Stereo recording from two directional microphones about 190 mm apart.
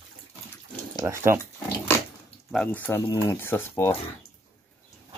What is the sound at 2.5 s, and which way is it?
Speech, 5° left (ahead or behind).